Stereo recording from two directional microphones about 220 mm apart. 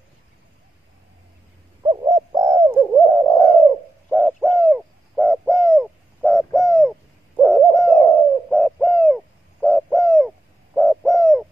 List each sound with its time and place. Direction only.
1.8 s bird: 20° right (ahead or behind); by 11.4 s centre (ahead or behind)